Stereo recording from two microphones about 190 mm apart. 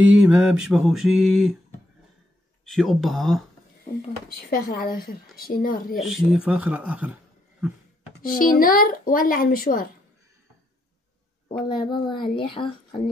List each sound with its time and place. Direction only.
0.1 s mantra: 5° right (ahead or behind)
2.7 s mantra: centre (ahead or behind)
4.5 s speech: 50° left (ahead or behind)
5.9 s mantra: centre (ahead or behind)
8.2 s speech: 50° left (ahead or behind)
11.4 s speech: 25° left (ahead or behind)